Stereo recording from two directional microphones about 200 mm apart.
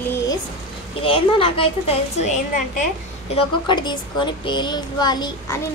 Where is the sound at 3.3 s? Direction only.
20° left (ahead or behind).